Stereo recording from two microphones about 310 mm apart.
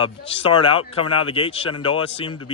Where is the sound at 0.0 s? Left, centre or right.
Centre.